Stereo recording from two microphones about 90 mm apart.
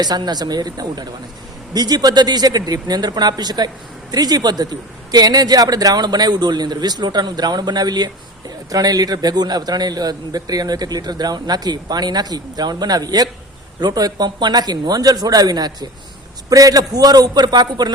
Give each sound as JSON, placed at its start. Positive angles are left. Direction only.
{"t": 0.0, "sound": "a man's voice", "side_deg": -50}